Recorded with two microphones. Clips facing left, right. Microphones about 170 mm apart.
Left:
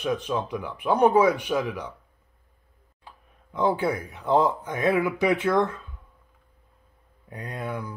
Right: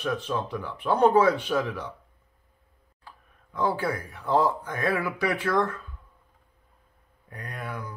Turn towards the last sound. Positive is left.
turn(degrees=25)  # may be behind; listen again after turning